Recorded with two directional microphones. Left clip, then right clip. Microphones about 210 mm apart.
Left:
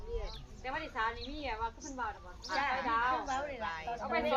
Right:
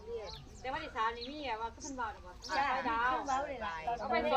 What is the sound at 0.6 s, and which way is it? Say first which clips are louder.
A woman's voice: even; 5° left (ahead or behind).